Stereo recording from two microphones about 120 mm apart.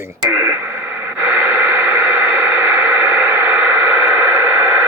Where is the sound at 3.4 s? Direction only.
15° right (ahead or behind).